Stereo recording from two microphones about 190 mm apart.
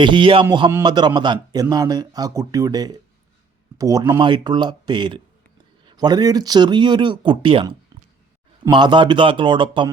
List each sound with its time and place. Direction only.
0.0 s speech: 25° right (ahead or behind)